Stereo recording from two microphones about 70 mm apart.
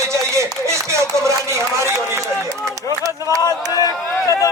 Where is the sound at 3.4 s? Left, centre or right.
Left.